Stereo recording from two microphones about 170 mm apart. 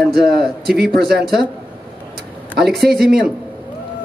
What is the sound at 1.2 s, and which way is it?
Speech, centre (ahead or behind).